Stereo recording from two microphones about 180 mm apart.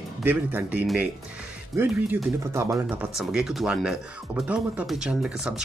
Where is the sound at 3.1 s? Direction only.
Centre (ahead or behind).